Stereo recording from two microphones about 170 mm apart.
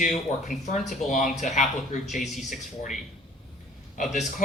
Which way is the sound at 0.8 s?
45° left (ahead or behind).